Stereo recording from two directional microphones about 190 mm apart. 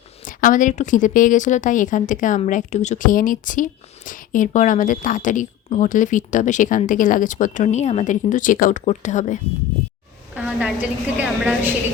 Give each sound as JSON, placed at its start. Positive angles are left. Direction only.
{"t": 0.3, "sound": "a woman's voice", "side_deg": 45}
{"t": 10.3, "sound": "a woman's voice", "side_deg": -5}